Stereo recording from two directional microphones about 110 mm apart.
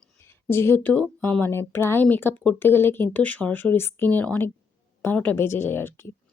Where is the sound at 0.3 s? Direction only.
20° left (ahead or behind).